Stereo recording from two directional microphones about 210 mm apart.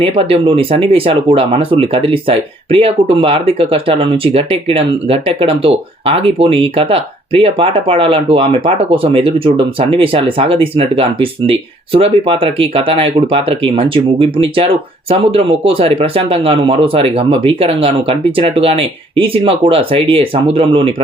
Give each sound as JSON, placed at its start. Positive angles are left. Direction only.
{"t": 0.0, "sound": "speech", "side_deg": -25}